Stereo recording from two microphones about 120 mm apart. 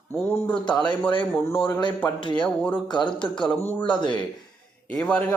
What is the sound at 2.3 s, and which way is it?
Speech, 10° left (ahead or behind).